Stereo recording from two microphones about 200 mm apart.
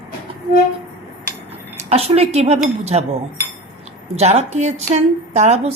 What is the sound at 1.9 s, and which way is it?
A woman's voice, 30° right (ahead or behind).